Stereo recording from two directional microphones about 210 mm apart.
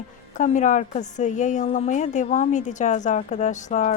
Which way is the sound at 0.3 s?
35° left (ahead or behind).